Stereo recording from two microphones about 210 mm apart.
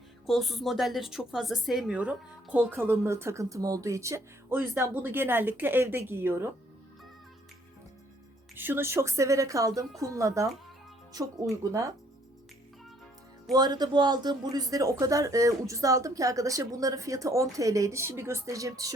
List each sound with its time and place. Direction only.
0.3 s a woman's voice: centre (ahead or behind)
8.5 s a woman's voice: 10° right (ahead or behind)
13.5 s a woman's voice: 20° right (ahead or behind)